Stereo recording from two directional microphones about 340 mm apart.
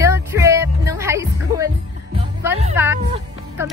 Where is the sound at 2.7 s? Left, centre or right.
Centre.